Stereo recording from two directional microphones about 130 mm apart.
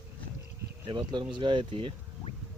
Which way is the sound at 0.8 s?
35° right (ahead or behind).